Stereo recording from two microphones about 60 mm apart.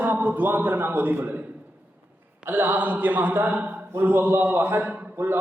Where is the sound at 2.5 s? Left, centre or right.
Right.